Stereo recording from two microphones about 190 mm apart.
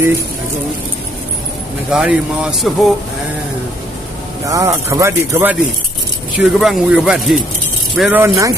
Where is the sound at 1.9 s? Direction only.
5° right (ahead or behind).